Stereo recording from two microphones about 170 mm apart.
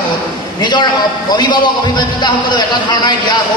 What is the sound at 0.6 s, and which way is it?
A man's voice, 25° left (ahead or behind).